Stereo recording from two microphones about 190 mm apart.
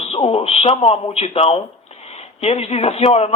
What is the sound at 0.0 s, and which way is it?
Speech, 30° left (ahead or behind).